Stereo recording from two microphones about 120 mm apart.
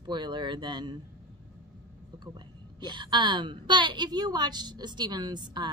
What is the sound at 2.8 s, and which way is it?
A woman's voice, 40° right (ahead or behind).